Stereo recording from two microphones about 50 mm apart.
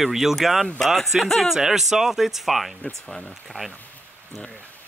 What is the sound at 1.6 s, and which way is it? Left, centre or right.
Speech, centre.